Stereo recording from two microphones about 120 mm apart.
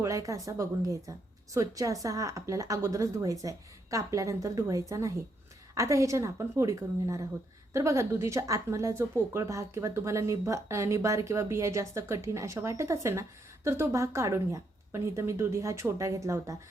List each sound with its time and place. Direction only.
0.0 s speech: 25° right (ahead or behind)